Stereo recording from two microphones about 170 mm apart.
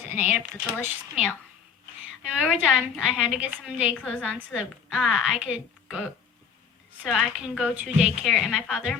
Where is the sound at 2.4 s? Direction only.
5° right (ahead or behind).